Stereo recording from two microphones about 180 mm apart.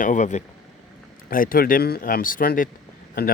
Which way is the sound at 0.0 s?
45° left (ahead or behind).